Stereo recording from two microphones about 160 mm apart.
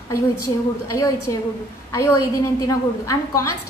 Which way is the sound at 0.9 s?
20° left (ahead or behind).